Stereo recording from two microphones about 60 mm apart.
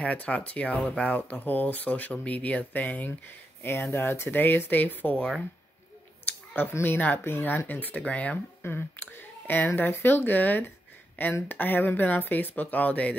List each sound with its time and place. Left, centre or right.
0.0 s speech: left
3.6 s speech: left
6.2 s a sound: left
6.7 s speech: left
8.6 s speech: left